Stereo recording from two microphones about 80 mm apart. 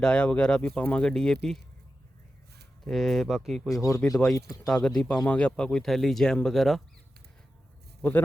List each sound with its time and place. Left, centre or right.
0.0 s speech: centre
2.8 s speech: centre
3.8 s speech: left
4.6 s speech: centre